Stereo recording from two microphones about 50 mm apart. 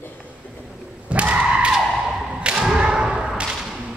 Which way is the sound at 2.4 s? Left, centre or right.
Centre.